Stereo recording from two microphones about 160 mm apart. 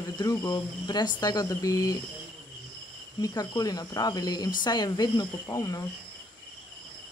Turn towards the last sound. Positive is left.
turn(degrees=20)  # may be behind; listen again after turning